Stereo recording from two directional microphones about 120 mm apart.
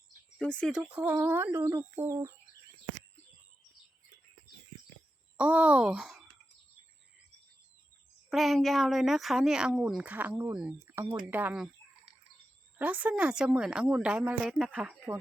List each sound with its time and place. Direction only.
0.3 s speech: 5° left (ahead or behind)
0.7 s speech: 10° right (ahead or behind)
5.4 s speech: 10° right (ahead or behind)
8.3 s speech: centre (ahead or behind)
12.8 s speech: 15° right (ahead or behind)